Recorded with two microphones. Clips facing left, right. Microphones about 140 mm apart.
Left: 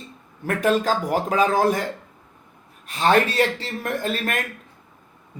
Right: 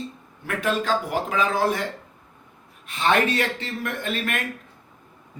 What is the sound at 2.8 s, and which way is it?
Speech, 35° left (ahead or behind).